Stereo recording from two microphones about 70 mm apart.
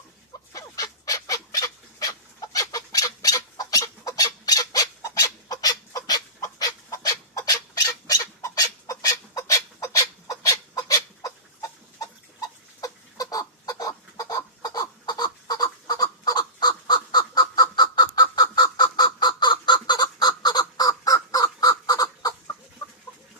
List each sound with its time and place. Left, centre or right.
0.5 s goose: left
7.4 s fowl: left
8.5 s chicken: left
22.8 s chicken: left